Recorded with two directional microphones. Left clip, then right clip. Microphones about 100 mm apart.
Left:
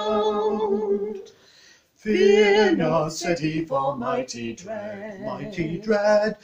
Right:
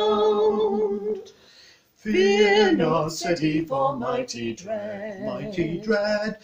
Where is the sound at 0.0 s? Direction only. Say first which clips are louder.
Right 2 dB; 35° right (ahead or behind).